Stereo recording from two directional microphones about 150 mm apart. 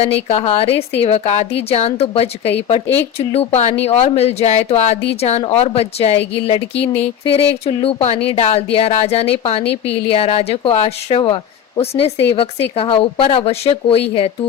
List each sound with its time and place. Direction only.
0.3 s a woman's voice: 40° left (ahead or behind)